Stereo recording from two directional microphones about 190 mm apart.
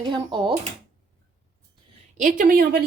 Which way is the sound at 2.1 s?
45° right (ahead or behind).